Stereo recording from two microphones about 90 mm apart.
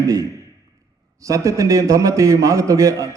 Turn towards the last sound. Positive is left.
turn(degrees=-35)  # may be behind; listen again after turning